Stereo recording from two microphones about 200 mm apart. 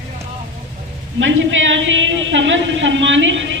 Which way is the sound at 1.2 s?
70° right (ahead or behind).